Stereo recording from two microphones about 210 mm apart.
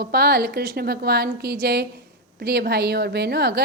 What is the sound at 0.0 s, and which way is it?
A woman's voice, 45° right (ahead or behind).